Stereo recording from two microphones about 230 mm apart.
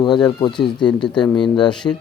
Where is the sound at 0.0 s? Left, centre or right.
Centre.